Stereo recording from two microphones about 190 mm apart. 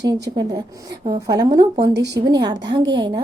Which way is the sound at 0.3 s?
20° right (ahead or behind).